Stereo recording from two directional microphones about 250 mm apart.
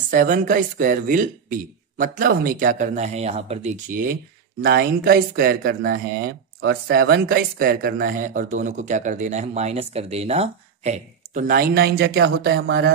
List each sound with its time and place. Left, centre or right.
0.1 s speech: right